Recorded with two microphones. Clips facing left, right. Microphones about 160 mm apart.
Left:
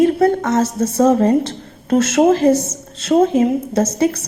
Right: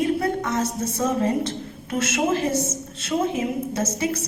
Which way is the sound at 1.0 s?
35° left (ahead or behind).